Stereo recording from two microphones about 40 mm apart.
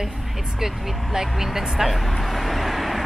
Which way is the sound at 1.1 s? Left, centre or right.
Centre.